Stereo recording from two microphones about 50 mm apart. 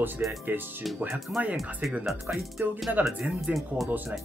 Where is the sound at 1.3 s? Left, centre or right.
Right.